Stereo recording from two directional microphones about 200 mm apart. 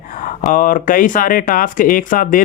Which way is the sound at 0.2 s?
40° left (ahead or behind).